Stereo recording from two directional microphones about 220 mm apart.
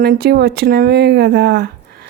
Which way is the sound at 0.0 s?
45° right (ahead or behind).